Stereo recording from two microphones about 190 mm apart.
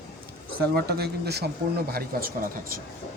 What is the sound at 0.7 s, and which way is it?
Speech, 55° right (ahead or behind).